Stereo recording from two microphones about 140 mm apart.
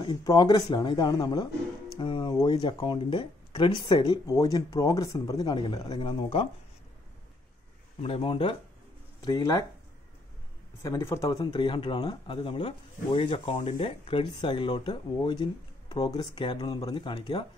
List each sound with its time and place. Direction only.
0.0 s speech: 30° left (ahead or behind)
2.0 s music: 35° left (ahead or behind)
2.5 s speech: 35° left (ahead or behind)
8.0 s speech: 40° left (ahead or behind)
9.2 s speech: 25° left (ahead or behind)
10.8 s speech: 20° left (ahead or behind)